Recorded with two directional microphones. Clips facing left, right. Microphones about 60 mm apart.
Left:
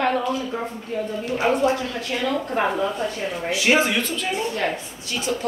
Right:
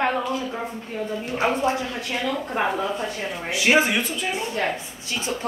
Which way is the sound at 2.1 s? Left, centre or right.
Centre.